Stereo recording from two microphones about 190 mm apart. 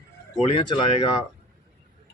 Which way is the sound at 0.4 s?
25° left (ahead or behind).